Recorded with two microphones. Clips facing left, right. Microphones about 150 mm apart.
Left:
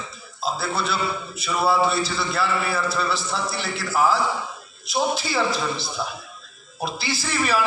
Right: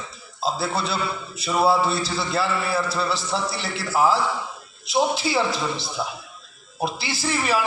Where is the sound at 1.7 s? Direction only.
35° right (ahead or behind).